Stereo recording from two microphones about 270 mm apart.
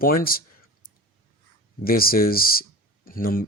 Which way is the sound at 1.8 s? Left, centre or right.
Left.